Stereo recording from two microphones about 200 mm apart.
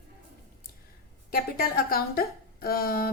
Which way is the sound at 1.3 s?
45° left (ahead or behind).